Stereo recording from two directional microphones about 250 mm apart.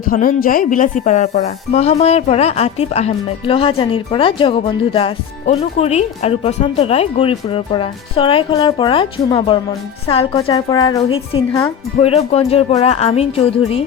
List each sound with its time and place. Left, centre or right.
0.0 s a woman's voice: left